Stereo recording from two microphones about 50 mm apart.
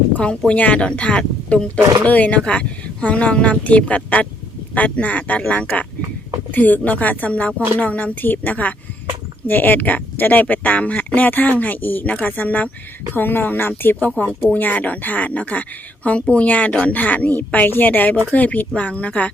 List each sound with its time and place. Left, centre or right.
0.2 s speech: left
14.2 s speech: left